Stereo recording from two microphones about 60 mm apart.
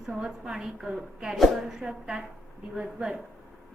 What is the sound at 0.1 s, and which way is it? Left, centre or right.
A woman's voice, centre.